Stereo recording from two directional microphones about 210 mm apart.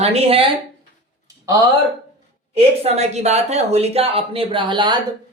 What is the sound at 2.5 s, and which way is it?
Speech, 30° right (ahead or behind).